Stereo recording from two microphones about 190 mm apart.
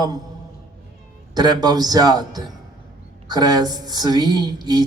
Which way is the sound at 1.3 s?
20° right (ahead or behind).